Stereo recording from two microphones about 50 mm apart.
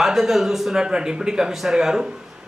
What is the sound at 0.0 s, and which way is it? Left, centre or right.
Speech, centre.